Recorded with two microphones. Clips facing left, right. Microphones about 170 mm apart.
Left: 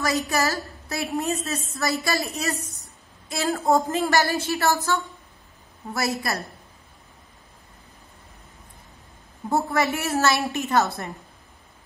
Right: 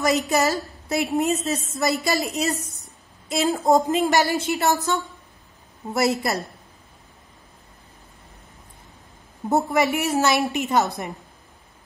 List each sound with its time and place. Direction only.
0.0 s a woman's voice: 20° right (ahead or behind)
9.5 s a woman's voice: 15° right (ahead or behind)